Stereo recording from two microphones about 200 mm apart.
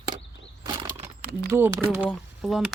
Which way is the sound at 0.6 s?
25° right (ahead or behind).